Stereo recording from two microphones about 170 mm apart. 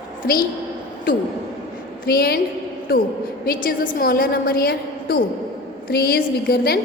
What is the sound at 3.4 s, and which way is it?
A woman's voice, 60° left (ahead or behind).